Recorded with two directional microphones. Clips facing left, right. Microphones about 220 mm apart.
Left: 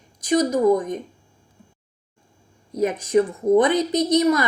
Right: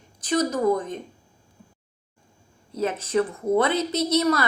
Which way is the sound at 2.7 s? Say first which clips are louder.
Left 4 dB; 15° left (ahead or behind).